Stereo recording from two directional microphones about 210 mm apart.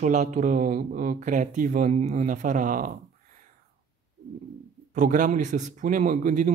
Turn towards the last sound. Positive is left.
turn(degrees=-35)  # may be behind; listen again after turning